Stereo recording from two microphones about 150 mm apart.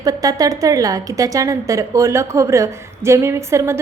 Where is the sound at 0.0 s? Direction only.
25° right (ahead or behind).